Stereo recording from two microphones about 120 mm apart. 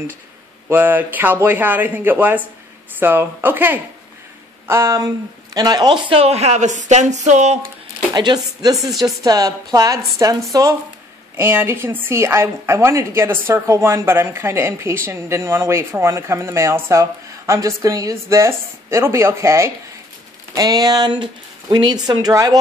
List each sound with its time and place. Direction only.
0.7 s a man's voice: 15° right (ahead or behind); by 7.6 s 70° right (ahead or behind)
8.1 s a woman's voice: 35° right (ahead or behind)